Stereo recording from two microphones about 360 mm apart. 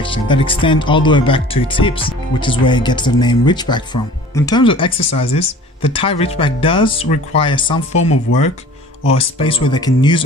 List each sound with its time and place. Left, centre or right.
0.0 s speech: centre
8.3 s speech: left
9.0 s speech: centre